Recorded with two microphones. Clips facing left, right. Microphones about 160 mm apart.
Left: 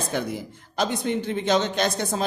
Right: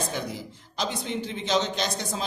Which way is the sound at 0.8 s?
55° left (ahead or behind).